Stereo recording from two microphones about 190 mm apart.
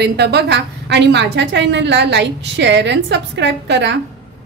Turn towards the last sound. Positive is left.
turn(degrees=-65)  # may be behind; listen again after turning